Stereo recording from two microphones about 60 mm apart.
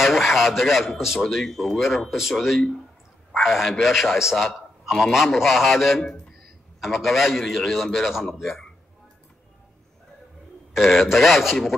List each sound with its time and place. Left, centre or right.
0.0 s a man's voice: centre
10.7 s a man's voice: centre